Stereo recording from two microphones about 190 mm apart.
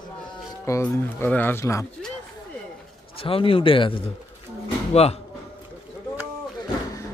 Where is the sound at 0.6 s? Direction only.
10° left (ahead or behind).